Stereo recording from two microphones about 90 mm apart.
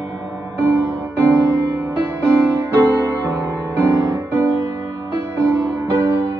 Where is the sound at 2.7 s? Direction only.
25° right (ahead or behind).